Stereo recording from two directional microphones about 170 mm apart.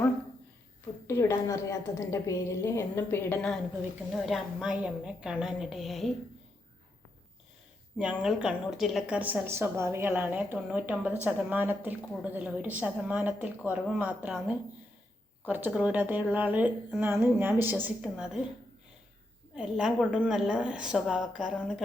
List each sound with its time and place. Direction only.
1.0 s a woman's voice: 15° left (ahead or behind)
4.1 s a woman's voice: centre (ahead or behind)
7.9 s a woman's voice: 5° right (ahead or behind)
15.4 s a woman's voice: 10° right (ahead or behind)
19.5 s a woman's voice: 5° right (ahead or behind)